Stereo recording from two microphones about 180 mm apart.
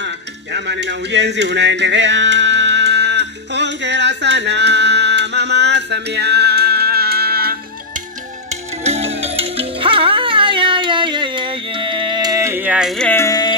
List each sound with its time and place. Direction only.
0.0 s music: 70° right (ahead or behind)
8.8 s music: 35° right (ahead or behind); by 13.6 s 20° left (ahead or behind)